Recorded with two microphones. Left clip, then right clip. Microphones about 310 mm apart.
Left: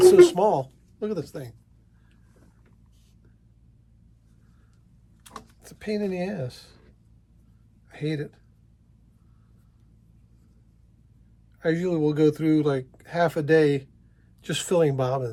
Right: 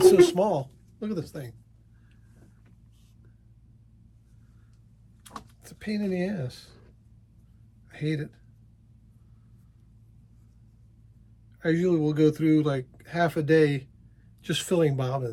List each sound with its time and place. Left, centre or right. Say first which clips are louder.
0.0 s a woman's voice: left 3 dB; centre
5.2 s a sound: even; centre
7.9 s speech: left 2 dB; centre
11.6 s speech: left 1 dB; centre